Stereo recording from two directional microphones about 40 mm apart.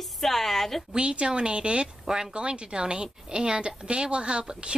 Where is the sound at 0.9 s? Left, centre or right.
Right.